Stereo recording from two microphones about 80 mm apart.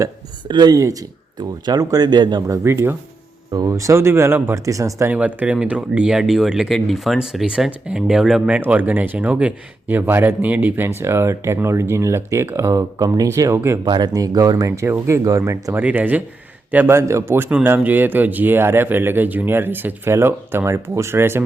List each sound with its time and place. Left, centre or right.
0.4 s speech: right
0.7 s speech: right
1.4 s speech: right
2.5 s speech: right
3.5 s speech: right
4.6 s speech: right
5.0 s speech: centre
8.4 s speech: centre; by 13.6 s right
13.8 s speech: right
15.7 s speech: right